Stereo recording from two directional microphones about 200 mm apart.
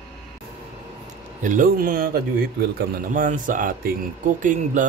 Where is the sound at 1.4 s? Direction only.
40° right (ahead or behind).